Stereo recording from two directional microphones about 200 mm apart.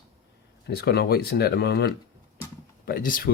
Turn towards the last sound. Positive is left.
turn(degrees=45)  # may be behind; listen again after turning